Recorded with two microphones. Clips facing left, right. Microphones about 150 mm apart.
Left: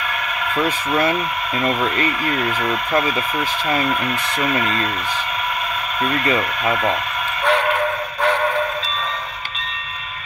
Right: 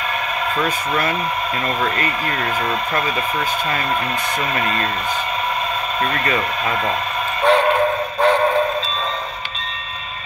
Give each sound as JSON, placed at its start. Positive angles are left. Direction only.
{"t": 1.6, "sound": "speech", "side_deg": 15}
{"t": 2.0, "sound": "speech", "side_deg": -30}
{"t": 4.4, "sound": "speech", "side_deg": -30}
{"t": 7.4, "sound": "music", "side_deg": -30}